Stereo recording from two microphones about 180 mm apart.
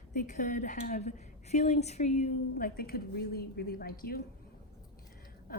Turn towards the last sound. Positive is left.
turn(degrees=55)  # may be behind; listen again after turning